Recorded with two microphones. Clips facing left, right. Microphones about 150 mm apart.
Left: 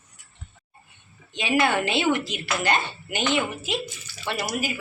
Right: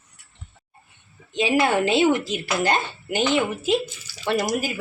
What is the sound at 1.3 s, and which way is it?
A woman's voice, 30° right (ahead or behind).